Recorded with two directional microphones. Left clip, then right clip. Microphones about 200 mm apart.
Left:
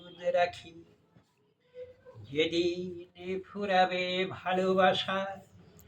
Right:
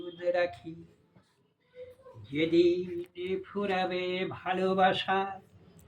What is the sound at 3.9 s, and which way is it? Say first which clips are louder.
Speech: left 1 dB; 10° left (ahead or behind).